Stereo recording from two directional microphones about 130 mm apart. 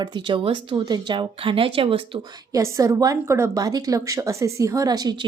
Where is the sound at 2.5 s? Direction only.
25° right (ahead or behind).